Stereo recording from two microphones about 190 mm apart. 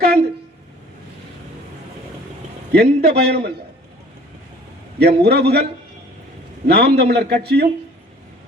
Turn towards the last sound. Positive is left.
turn(degrees=-60)  # may be behind; listen again after turning